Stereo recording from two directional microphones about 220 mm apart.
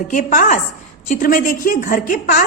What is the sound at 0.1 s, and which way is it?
A woman's voice, 35° left (ahead or behind).